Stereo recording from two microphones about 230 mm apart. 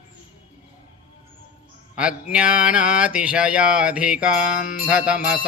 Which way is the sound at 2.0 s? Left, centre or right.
Centre.